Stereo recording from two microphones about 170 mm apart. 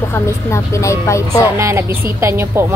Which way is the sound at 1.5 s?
15° right (ahead or behind).